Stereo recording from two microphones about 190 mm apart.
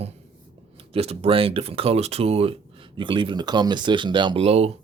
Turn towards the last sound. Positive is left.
turn(degrees=-30)  # may be behind; listen again after turning